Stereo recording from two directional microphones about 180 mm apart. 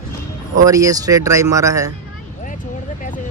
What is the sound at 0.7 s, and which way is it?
Speech, 20° right (ahead or behind).